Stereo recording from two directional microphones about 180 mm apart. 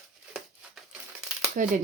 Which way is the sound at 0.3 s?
Centre (ahead or behind).